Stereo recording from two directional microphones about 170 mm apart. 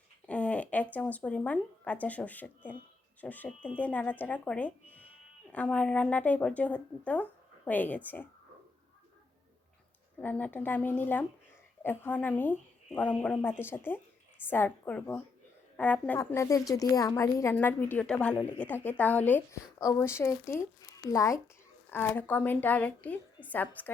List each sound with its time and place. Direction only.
0.3 s a woman's voice: 10° left (ahead or behind)
10.2 s a woman's voice: 10° left (ahead or behind)